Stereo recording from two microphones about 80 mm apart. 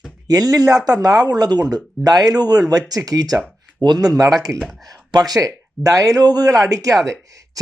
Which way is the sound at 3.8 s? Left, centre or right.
Right.